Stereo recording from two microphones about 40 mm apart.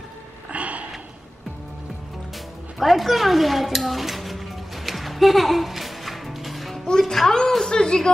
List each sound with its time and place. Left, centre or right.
0.5 s sniff: right
2.8 s a child's voice: centre
4.8 s music: centre
7.7 s speech: centre